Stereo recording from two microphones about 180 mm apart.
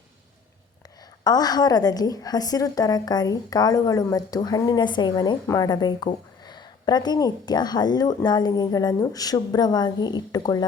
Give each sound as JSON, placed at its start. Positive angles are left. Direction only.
{"t": 1.2, "sound": "a woman's voice", "side_deg": 20}